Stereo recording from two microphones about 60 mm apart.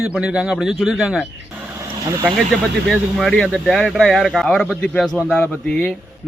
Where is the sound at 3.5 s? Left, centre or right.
Centre.